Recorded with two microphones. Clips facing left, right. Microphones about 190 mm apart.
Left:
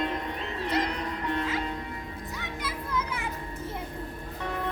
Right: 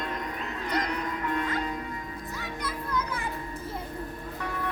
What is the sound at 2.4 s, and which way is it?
Music, 5° left (ahead or behind).